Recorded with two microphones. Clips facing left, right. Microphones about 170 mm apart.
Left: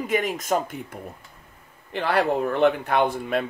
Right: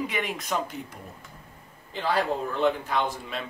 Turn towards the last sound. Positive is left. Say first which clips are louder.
# left 7 dB
turn(degrees=55)  # may be behind; listen again after turning